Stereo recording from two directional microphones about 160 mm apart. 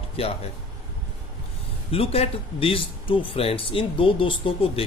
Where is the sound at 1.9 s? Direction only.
40° left (ahead or behind).